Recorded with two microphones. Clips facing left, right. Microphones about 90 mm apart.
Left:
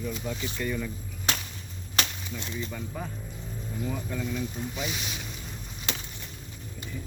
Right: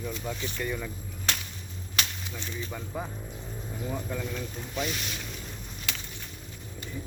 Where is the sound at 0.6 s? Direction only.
10° right (ahead or behind).